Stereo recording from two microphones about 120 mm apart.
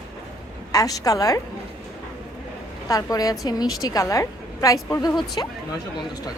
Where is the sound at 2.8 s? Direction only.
30° left (ahead or behind).